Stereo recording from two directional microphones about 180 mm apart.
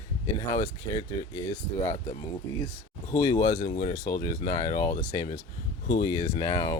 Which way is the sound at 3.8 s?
25° left (ahead or behind).